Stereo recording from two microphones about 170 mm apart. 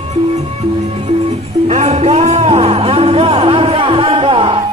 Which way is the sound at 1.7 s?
40° right (ahead or behind).